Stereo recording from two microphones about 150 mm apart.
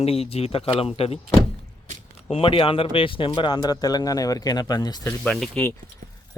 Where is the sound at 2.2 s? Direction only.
40° left (ahead or behind).